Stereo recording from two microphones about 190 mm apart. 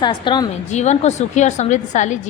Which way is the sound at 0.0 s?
25° left (ahead or behind).